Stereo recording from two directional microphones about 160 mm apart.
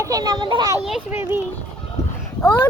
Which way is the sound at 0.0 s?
20° right (ahead or behind).